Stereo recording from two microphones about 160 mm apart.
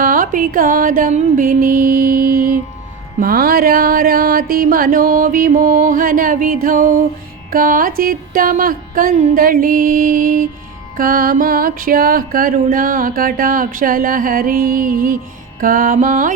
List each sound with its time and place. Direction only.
0.0 s music: 60° right (ahead or behind)